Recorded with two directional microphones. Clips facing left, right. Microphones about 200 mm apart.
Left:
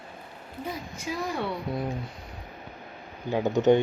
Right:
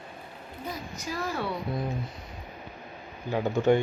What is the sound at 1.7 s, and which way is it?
Speech, 10° left (ahead or behind).